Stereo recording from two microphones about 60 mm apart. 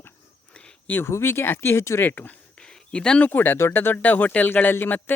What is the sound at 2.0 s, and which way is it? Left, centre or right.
Speech, left.